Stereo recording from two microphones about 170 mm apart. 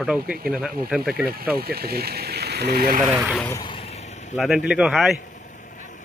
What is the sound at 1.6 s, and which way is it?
Speech, 65° right (ahead or behind).